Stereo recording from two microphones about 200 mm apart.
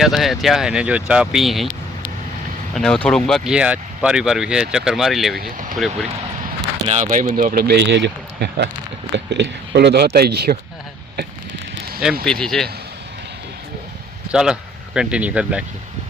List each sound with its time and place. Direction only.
0.0 s speech: centre (ahead or behind)
2.7 s speech: 5° left (ahead or behind)
5.4 s speech: 45° right (ahead or behind)
5.7 s speech: centre (ahead or behind)
6.8 s speech: 35° right (ahead or behind); by 10.6 s 50° right (ahead or behind)
12.2 s speech: 5° left (ahead or behind)
14.3 s speech: 5° right (ahead or behind)